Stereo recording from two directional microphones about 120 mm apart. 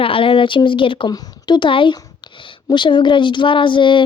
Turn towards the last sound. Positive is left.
turn(degrees=40)  # may be behind; listen again after turning